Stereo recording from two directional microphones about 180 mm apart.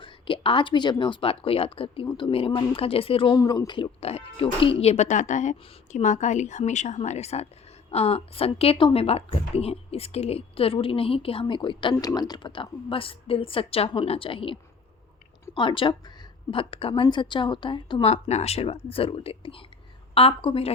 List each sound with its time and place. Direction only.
0.0 s a woman's voice: 30° left (ahead or behind)